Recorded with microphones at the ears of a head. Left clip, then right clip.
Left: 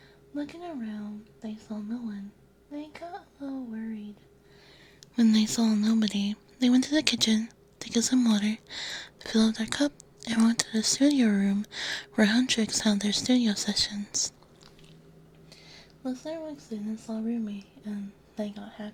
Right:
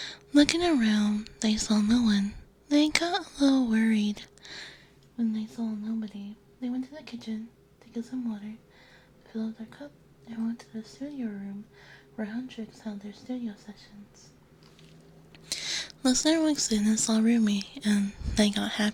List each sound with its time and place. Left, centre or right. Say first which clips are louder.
0.0 s speech: right 14 dB; right
5.1 s speech: left 8 dB; left
15.4 s speech: right 19 dB; right